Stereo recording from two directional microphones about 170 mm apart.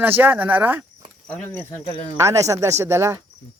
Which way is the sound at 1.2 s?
10° left (ahead or behind).